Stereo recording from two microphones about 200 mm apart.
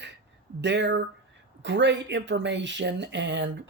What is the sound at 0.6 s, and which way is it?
Speech, 60° right (ahead or behind).